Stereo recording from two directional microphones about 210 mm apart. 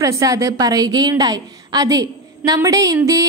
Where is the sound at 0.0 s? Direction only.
15° right (ahead or behind).